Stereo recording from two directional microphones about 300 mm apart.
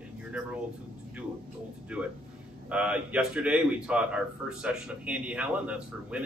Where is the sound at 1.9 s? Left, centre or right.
Centre.